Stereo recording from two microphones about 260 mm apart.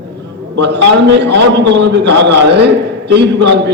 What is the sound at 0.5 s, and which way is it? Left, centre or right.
A man's voice, right.